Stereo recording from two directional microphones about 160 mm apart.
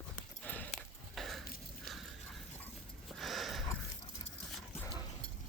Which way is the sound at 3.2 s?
Centre (ahead or behind).